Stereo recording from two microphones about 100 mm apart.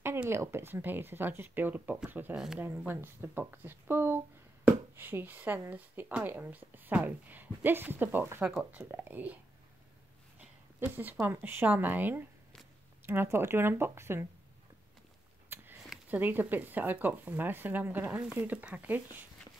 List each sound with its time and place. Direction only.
0.3 s speech: 25° right (ahead or behind)
2.3 s speech: 5° right (ahead or behind)
2.9 s speech: 20° right (ahead or behind)
10.8 s speech: 20° right (ahead or behind)
15.5 s a sound: 25° right (ahead or behind)
16.1 s speech: 20° right (ahead or behind)